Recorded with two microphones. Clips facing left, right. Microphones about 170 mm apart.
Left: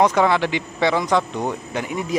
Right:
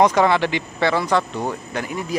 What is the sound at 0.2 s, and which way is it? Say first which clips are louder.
Speech: right 1 dB; 10° left (ahead or behind).